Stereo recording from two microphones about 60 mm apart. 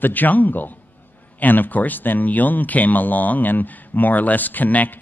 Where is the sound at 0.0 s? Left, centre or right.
Left.